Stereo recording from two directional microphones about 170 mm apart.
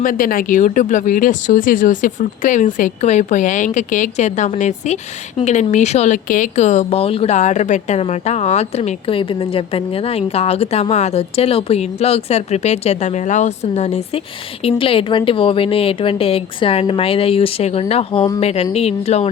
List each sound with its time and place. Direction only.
0.0 s speech: 55° left (ahead or behind)